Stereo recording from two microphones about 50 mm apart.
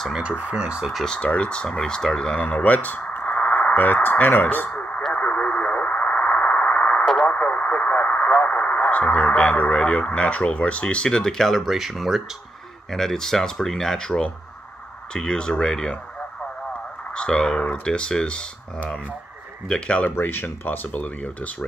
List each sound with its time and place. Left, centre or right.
0.4 s speech: right
1.0 s speech: left
2.4 s speech: left
5.1 s radio: left
7.2 s speech: left; by 12.2 s centre
12.9 s speech: centre
17.1 s speech: centre
19.7 s speech: left
20.2 s speech: left